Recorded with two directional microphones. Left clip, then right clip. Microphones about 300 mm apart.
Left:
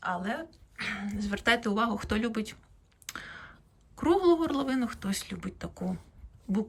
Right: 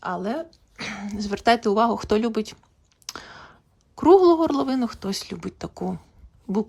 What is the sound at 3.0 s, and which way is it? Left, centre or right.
Clicking, centre.